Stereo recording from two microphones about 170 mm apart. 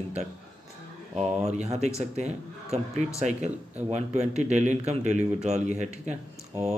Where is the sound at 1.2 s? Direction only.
40° right (ahead or behind).